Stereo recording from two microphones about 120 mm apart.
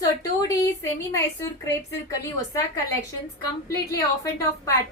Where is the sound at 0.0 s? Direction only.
30° left (ahead or behind).